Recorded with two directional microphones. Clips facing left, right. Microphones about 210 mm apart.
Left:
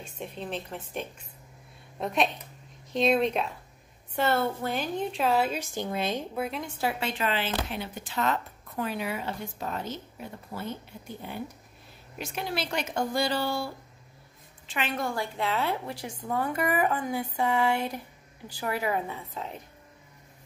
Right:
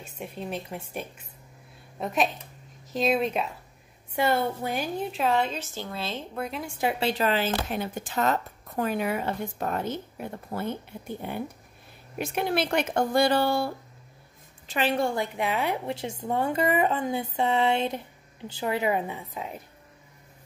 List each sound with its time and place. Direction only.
0.0 s a woman's voice: 10° right (ahead or behind)
4.1 s a woman's voice: 15° right (ahead or behind)
5.1 s a woman's voice: centre (ahead or behind); by 6.2 s 15° left (ahead or behind)
6.3 s speech: 5° left (ahead or behind)
6.6 s a woman's voice: 10° right (ahead or behind)
6.9 s speech: 35° right (ahead or behind); by 13.7 s 55° right (ahead or behind)
14.7 s a woman's voice: 35° right (ahead or behind); by 19.6 s 10° right (ahead or behind)